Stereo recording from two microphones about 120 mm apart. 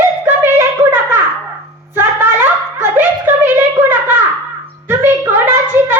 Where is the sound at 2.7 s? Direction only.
20° right (ahead or behind).